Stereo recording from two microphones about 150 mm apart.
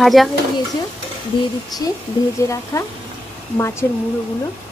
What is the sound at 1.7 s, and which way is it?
A woman's voice, 25° left (ahead or behind).